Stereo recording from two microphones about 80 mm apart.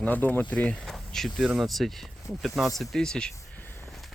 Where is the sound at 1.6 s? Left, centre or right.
Centre.